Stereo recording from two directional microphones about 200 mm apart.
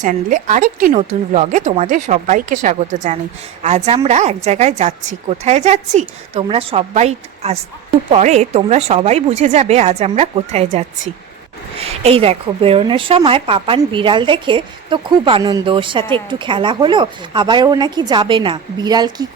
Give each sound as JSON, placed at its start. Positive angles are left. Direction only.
{"t": 0.0, "sound": "a woman's voice", "side_deg": -40}
{"t": 12.0, "sound": "a woman's voice", "side_deg": -30}